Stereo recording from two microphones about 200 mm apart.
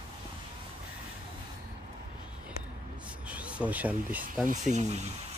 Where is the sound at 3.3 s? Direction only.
5° right (ahead or behind).